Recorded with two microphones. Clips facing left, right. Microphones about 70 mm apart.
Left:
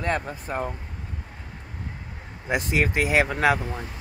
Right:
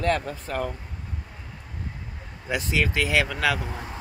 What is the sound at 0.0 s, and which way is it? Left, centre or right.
Speech, left.